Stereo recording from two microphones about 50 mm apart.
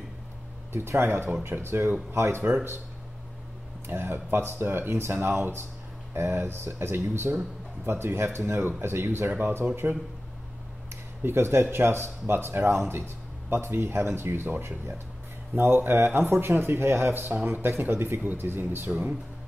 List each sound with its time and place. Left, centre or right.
0.7 s speech: right
3.8 s speech: right
7.8 s speech: right
11.2 s speech: right
17.1 s speech: right